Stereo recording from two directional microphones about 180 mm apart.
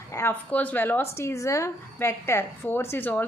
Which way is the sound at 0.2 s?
10° left (ahead or behind).